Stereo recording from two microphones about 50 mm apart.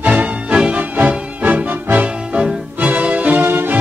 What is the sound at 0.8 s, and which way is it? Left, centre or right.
Music, right.